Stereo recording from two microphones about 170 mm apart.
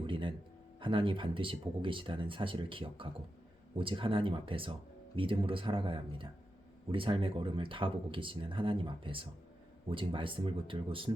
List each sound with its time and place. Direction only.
0.1 s speech: 30° right (ahead or behind)